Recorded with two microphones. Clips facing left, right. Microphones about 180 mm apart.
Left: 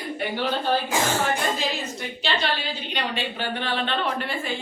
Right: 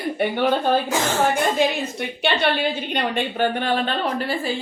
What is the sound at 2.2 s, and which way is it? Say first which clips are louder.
A woman's voice: right 6 dB; 60° right (ahead or behind).